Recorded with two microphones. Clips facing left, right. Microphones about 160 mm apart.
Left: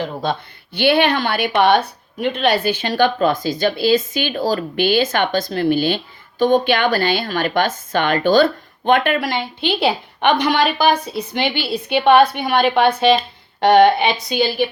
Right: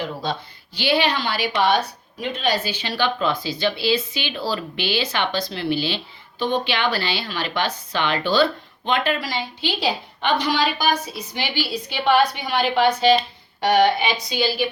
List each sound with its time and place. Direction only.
0.0 s speech: 55° left (ahead or behind)